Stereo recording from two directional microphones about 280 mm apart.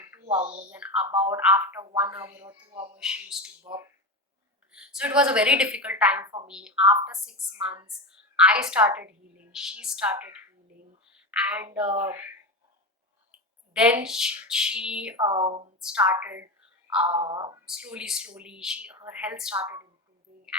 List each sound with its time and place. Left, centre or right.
0.0 s speech: centre
0.7 s a woman's voice: centre
3.0 s a woman's voice: centre
3.6 s speech: centre
4.7 s a woman's voice: centre
11.3 s a woman's voice: centre
13.7 s a woman's voice: centre
15.2 s speech: centre
15.8 s a woman's voice: centre
17.1 s speech: centre
17.7 s a woman's voice: centre